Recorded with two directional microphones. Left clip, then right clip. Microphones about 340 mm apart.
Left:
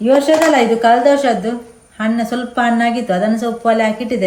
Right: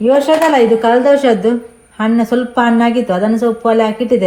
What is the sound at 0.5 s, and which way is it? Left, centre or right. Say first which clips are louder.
A woman's voice: right 1 dB; right.